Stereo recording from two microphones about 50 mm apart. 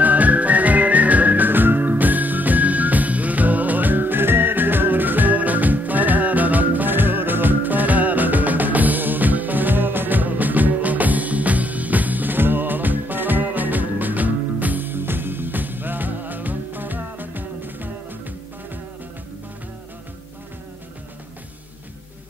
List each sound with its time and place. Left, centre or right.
0.0 s whistling: right